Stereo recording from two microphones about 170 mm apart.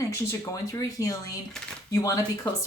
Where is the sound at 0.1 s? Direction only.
20° left (ahead or behind).